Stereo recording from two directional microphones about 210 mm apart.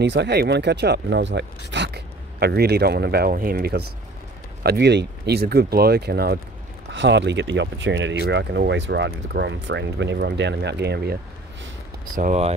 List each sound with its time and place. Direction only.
0.0 s speech: 55° right (ahead or behind)
12.2 s speech: 35° right (ahead or behind)